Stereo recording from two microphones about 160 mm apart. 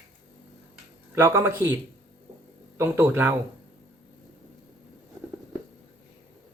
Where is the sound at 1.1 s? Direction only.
15° right (ahead or behind).